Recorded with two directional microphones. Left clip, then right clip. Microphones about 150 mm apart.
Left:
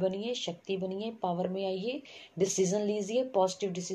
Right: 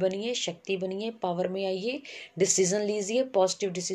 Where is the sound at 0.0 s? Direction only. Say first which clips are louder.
Right 4 dB; 40° right (ahead or behind).